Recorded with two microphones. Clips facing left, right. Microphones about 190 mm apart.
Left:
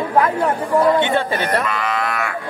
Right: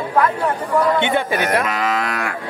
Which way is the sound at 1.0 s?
15° right (ahead or behind).